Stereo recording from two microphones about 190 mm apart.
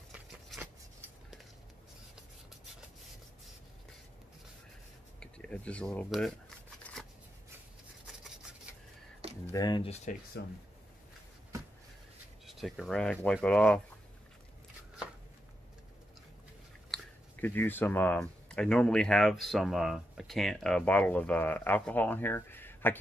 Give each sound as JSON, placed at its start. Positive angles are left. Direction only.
{"t": 0.1, "sound": "a sound", "side_deg": -5}
{"t": 5.2, "sound": "speech", "side_deg": 5}
{"t": 6.8, "sound": "shuffling cards", "side_deg": 5}
{"t": 9.5, "sound": "speech", "side_deg": 20}
{"t": 10.4, "sound": "speech", "side_deg": 65}
{"t": 12.4, "sound": "speech", "side_deg": 0}
{"t": 16.9, "sound": "speech", "side_deg": 10}